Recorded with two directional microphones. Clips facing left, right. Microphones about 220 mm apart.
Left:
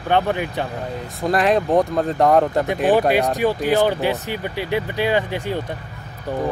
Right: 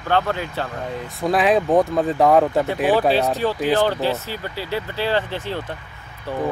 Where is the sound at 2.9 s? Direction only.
15° left (ahead or behind).